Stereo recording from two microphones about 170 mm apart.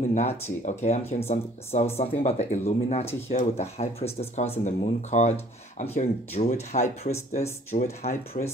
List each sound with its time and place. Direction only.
0.1 s speech: 45° left (ahead or behind)